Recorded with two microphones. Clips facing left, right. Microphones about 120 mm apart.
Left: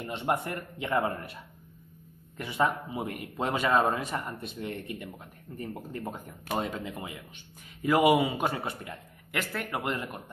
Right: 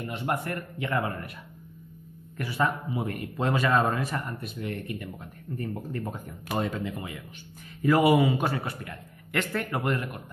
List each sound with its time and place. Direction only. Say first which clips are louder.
0.0 s a man's voice: even; 25° left (ahead or behind)
9.3 s a man's voice: right 4 dB; 5° left (ahead or behind)